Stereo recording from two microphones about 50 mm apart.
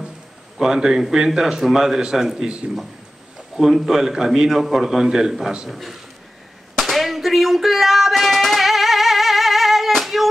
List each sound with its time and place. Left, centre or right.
0.6 s a man's voice: centre
2.6 s speech: right
3.5 s a man's voice: centre
6.8 s a sound: centre